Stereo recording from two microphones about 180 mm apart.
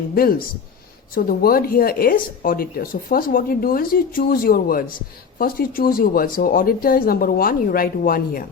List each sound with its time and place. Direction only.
0.1 s speech: 55° left (ahead or behind)